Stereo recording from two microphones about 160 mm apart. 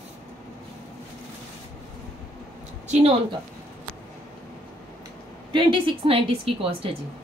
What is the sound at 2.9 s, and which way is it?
Speech, 35° right (ahead or behind).